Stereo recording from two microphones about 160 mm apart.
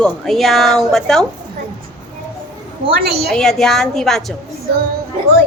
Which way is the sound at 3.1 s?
80° right.